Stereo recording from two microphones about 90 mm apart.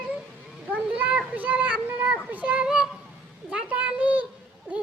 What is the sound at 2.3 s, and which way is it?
Child singing, 15° right (ahead or behind).